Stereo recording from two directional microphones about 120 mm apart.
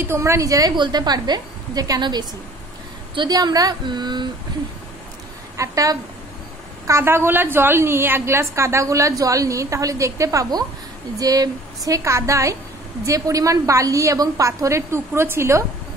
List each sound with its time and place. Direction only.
0.0 s a woman's voice: 20° right (ahead or behind); by 4.3 s 35° right (ahead or behind)
5.6 s a woman's voice: 30° right (ahead or behind)